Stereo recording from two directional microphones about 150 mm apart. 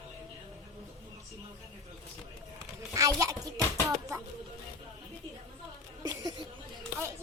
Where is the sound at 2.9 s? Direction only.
20° right (ahead or behind).